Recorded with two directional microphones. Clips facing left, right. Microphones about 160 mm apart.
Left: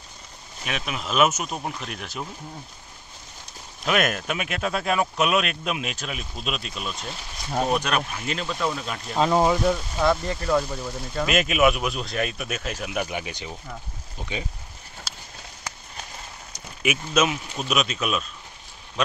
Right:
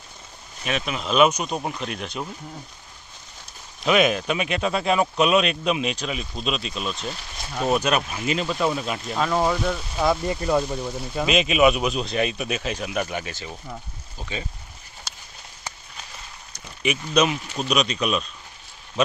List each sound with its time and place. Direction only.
0.7 s speech: 5° left (ahead or behind)
3.8 s speech: centre (ahead or behind)
9.1 s speech: 20° left (ahead or behind)
9.9 s speech: 10° right (ahead or behind)
11.2 s speech: centre (ahead or behind)
16.8 s speech: 5° left (ahead or behind)